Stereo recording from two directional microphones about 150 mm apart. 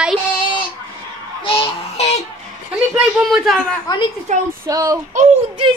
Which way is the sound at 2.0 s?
50° left (ahead or behind).